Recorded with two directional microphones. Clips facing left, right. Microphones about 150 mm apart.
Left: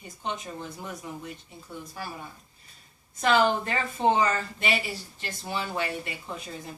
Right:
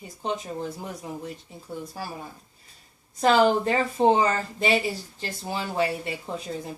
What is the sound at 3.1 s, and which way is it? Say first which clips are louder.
Speech: right 4 dB; 35° right (ahead or behind).